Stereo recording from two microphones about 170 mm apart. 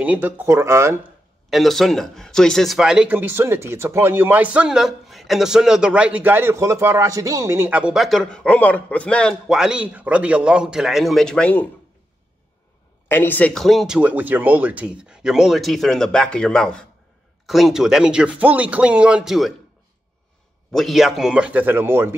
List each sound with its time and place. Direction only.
0.0 s speech: 10° right (ahead or behind)
1.5 s speech: centre (ahead or behind)
13.1 s speech: 10° left (ahead or behind)
20.7 s speech: centre (ahead or behind)